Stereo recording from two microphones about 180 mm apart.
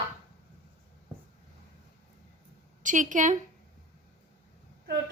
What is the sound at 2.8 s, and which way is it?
Speech, 45° right (ahead or behind).